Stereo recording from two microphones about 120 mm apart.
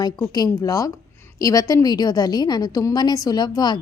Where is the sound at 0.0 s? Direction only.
35° left (ahead or behind).